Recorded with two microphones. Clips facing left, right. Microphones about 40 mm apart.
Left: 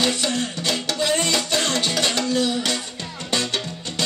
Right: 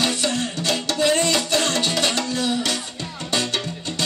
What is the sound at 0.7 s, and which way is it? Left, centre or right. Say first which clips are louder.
Music: right 3 dB; centre.